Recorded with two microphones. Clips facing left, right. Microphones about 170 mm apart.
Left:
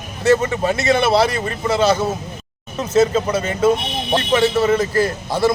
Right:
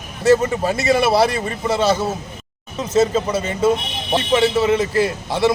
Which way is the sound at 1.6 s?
5° right (ahead or behind).